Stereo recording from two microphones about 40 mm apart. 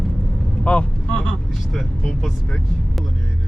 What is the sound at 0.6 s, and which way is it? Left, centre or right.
Vehicle, left.